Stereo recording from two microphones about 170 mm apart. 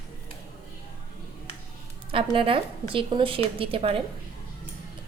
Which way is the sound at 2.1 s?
30° right (ahead or behind).